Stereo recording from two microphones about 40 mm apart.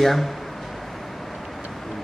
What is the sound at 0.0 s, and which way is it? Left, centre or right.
Speech, centre.